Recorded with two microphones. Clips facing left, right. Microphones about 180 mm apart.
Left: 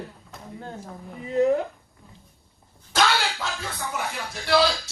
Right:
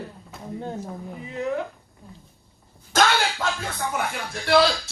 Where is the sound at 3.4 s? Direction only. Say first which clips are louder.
Right 4 dB; 50° right (ahead or behind).